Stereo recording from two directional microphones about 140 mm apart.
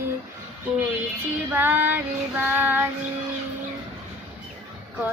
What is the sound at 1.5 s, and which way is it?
Child singing, 15° right (ahead or behind).